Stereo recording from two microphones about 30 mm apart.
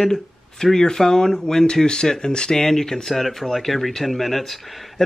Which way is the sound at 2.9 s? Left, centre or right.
Centre.